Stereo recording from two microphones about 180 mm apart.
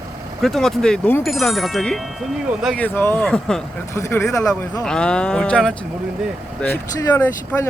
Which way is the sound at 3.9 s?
15° left (ahead or behind).